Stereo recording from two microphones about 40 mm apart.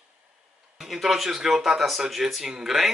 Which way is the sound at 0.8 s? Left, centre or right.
Centre.